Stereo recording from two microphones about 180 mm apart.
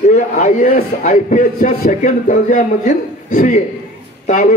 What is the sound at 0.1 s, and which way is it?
A man's voice, 45° left (ahead or behind).